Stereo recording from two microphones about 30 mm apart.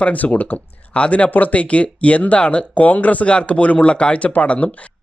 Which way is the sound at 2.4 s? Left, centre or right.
Left.